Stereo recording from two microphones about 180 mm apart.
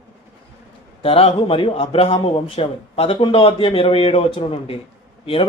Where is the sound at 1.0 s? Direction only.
30° left (ahead or behind).